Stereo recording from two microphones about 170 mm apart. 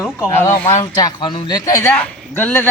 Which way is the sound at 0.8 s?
25° left (ahead or behind).